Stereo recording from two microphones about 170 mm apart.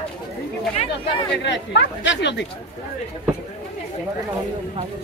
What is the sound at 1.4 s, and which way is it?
Speech, 90° left.